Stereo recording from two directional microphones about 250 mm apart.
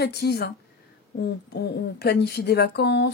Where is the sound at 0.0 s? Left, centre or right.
Left.